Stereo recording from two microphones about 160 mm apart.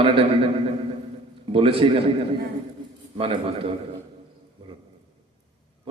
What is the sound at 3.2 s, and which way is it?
Speech, 35° right (ahead or behind).